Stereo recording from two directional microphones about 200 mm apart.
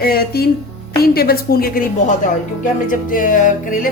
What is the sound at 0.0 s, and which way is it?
Speech, 50° left (ahead or behind).